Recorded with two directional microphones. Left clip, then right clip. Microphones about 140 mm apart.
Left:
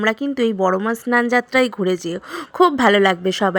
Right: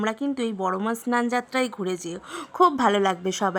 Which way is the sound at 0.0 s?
20° left (ahead or behind).